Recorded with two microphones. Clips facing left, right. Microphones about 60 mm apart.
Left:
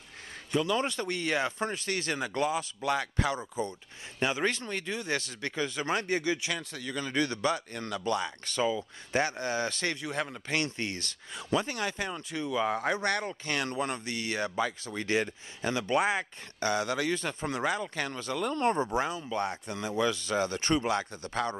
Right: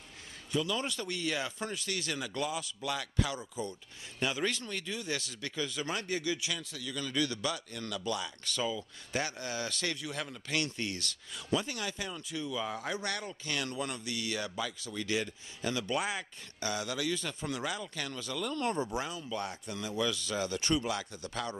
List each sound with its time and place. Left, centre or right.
0.5 s speech: left